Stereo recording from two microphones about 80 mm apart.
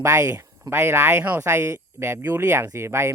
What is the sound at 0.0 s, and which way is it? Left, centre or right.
Speech, right.